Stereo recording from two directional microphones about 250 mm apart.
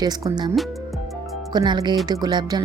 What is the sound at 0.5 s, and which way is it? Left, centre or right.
Music, centre.